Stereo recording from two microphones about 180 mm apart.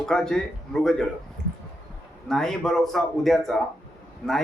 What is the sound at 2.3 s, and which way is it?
A man's voice, 5° left (ahead or behind).